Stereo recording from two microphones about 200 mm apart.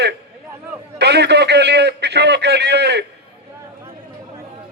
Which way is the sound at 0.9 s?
55° right (ahead or behind).